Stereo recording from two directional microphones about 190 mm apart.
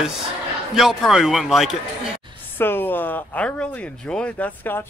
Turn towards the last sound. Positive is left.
turn(degrees=10)  # may be behind; listen again after turning